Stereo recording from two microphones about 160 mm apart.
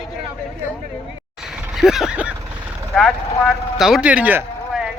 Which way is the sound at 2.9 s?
Centre (ahead or behind).